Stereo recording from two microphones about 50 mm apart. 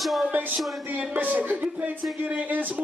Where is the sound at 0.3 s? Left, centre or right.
Right.